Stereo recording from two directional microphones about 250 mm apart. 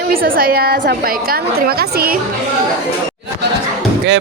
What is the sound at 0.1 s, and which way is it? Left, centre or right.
A woman's voice, right.